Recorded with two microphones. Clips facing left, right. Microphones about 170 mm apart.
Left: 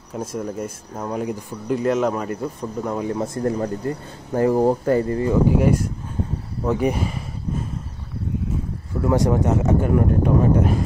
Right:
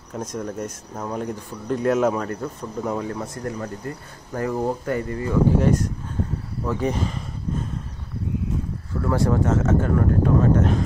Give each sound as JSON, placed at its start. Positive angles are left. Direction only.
{"t": 0.1, "sound": "speech", "side_deg": 5}
{"t": 3.0, "sound": "speech", "side_deg": 20}
{"t": 3.4, "sound": "speech", "side_deg": 30}
{"t": 5.3, "sound": "speech", "side_deg": 10}
{"t": 6.6, "sound": "a sound", "side_deg": 15}
{"t": 8.9, "sound": "speech", "side_deg": 15}